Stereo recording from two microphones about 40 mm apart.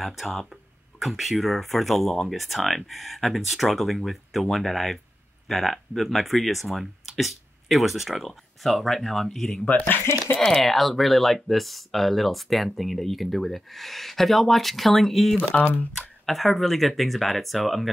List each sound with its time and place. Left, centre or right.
0.0 s speech: centre
9.7 s speech: left
10.6 s speech: centre
15.5 s speech: left
16.3 s speech: centre